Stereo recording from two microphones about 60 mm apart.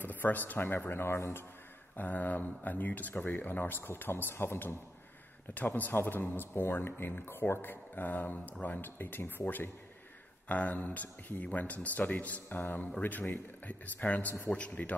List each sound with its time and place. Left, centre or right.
0.0 s speech: left
2.0 s speech: left
5.8 s speech: left